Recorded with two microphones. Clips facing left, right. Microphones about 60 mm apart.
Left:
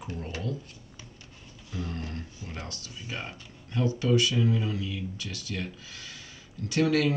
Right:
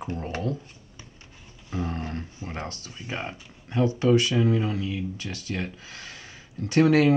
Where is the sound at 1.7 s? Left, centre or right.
Right.